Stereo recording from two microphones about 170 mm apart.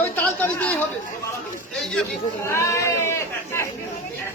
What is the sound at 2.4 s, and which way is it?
Speech, 15° left (ahead or behind).